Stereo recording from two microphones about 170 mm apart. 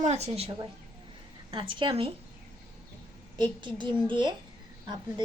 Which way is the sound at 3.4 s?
30° right (ahead or behind).